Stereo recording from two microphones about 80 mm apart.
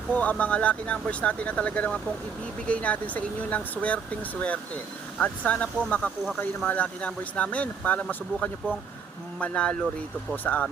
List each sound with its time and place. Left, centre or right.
0.1 s speech: centre